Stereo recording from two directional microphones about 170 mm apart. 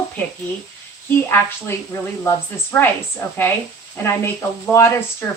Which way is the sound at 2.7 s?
10° left (ahead or behind).